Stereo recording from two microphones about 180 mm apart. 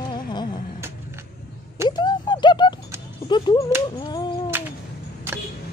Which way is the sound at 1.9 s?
25° left (ahead or behind).